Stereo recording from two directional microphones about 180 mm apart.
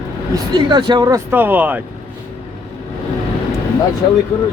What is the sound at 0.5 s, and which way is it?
Speech, 25° right (ahead or behind).